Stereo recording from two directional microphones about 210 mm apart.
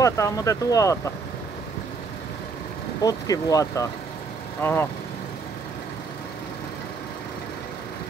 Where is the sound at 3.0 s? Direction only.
15° left (ahead or behind).